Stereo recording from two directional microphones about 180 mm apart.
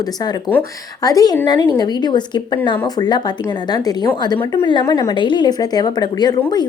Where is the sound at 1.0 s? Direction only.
20° left (ahead or behind).